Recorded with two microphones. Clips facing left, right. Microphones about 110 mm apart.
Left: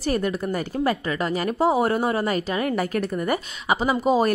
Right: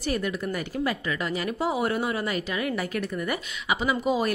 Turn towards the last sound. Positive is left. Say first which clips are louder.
# left 5 dB
turn(degrees=40)  # may be behind; listen again after turning